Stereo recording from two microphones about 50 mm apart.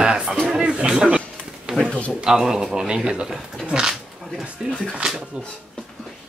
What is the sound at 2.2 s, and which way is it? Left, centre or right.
A man's voice, centre.